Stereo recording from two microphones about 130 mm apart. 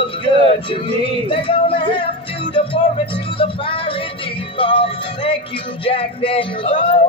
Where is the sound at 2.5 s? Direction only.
45° left (ahead or behind).